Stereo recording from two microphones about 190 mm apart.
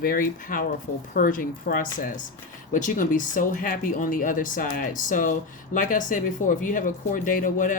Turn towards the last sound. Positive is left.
turn(degrees=45)  # may be behind; listen again after turning